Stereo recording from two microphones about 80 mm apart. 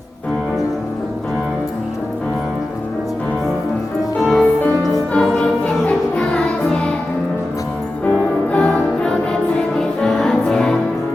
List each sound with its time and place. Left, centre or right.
4.2 s music: centre
8.5 s music: centre